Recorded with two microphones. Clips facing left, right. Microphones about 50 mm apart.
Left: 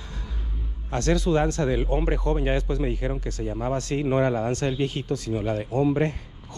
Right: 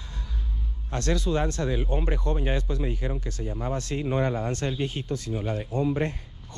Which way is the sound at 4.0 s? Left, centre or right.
Left.